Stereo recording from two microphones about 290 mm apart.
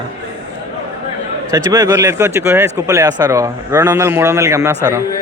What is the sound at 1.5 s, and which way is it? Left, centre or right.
A man's voice, centre.